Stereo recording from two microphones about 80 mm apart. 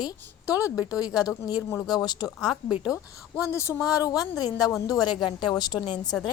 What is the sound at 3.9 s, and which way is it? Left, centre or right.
Speech, left.